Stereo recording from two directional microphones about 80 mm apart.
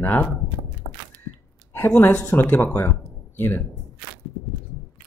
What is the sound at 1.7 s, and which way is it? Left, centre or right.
Speech, left.